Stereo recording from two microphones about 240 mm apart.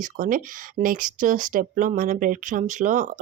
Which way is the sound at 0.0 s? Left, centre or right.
Right.